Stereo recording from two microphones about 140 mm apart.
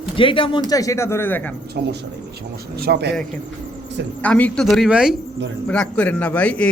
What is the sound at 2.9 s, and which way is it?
Speech, 90° right.